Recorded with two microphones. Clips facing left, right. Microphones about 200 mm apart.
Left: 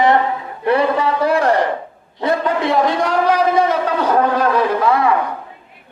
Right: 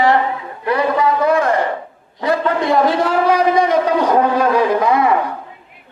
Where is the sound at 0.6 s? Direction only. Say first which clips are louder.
Left 1 dB; 30° left (ahead or behind).